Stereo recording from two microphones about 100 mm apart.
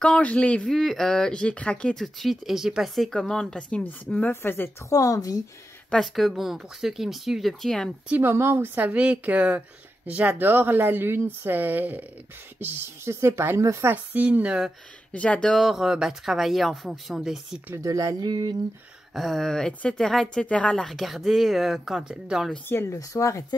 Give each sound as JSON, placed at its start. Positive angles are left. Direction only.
{"t": 0.0, "sound": "speech", "side_deg": 10}
{"t": 2.1, "sound": "speech", "side_deg": 0}
{"t": 4.9, "sound": "speech", "side_deg": 35}
{"t": 5.9, "sound": "speech", "side_deg": 0}
{"t": 8.1, "sound": "a woman's voice", "side_deg": -20}
{"t": 14.1, "sound": "a woman's voice", "side_deg": -15}
{"t": 15.1, "sound": "speech", "side_deg": 10}
{"t": 17.8, "sound": "speech", "side_deg": -35}
{"t": 19.1, "sound": "speech", "side_deg": 0}
{"t": 22.7, "sound": "speech", "side_deg": 30}